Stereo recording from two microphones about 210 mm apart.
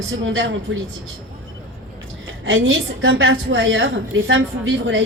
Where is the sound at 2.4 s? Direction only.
65° right (ahead or behind).